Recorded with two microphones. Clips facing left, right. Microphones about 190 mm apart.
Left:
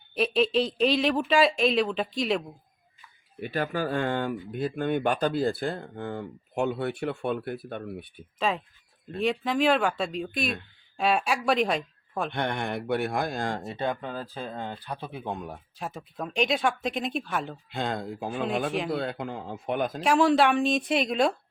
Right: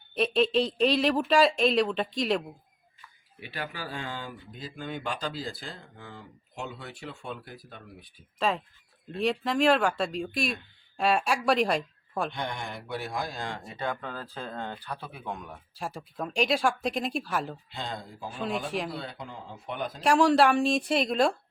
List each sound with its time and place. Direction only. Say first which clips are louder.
0.1 s speech: left 1 dB; centre (ahead or behind)
3.4 s speech: left 9 dB; 45° left (ahead or behind); by 8.2 s 60° left (ahead or behind)
8.4 s speech: even; centre (ahead or behind)
12.3 s speech: left 6 dB; 60° left (ahead or behind); by 13.7 s 45° left (ahead or behind)
13.7 s speech: left 3 dB; 20° left (ahead or behind)
16.0 s speech: left 1 dB; centre (ahead or behind)
17.7 s a man's voice: left 7 dB; 55° left (ahead or behind)
20.1 s speech: even; centre (ahead or behind)